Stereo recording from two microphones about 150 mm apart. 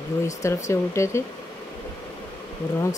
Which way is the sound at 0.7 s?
20° left (ahead or behind).